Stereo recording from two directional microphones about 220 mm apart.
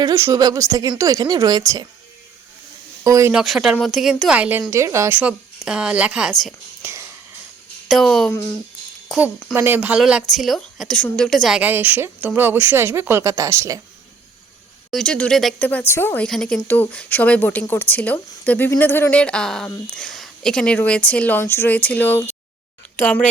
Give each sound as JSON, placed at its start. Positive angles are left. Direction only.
{"t": 0.0, "sound": "speech", "side_deg": -15}
{"t": 3.0, "sound": "speech", "side_deg": -15}
{"t": 3.3, "sound": "speech", "side_deg": 0}
{"t": 6.4, "sound": "a sound", "side_deg": -10}
{"t": 7.9, "sound": "speech", "side_deg": 0}
{"t": 14.8, "sound": "speech", "side_deg": 5}